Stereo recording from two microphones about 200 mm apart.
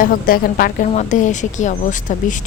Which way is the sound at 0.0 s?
45° left (ahead or behind).